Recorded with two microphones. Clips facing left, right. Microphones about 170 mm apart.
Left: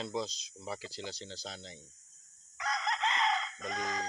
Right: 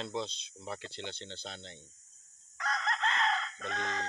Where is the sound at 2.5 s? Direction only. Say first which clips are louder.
Even; centre (ahead or behind).